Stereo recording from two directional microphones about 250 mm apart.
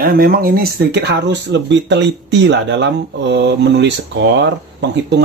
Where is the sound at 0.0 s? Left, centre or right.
Right.